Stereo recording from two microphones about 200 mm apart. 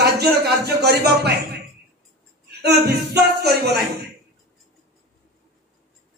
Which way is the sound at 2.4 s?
55° right (ahead or behind).